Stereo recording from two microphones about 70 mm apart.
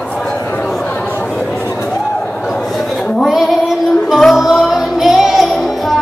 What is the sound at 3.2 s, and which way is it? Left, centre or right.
Female singing, centre.